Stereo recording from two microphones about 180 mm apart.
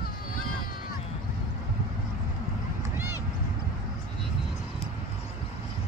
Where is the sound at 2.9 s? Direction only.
10° right (ahead or behind).